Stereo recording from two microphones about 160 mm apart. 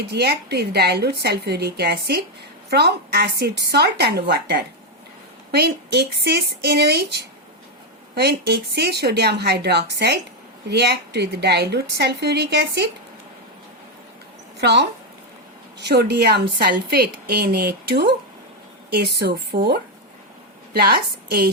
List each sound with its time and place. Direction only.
0.0 s a woman's voice: 90° right
14.6 s a woman's voice: 90° right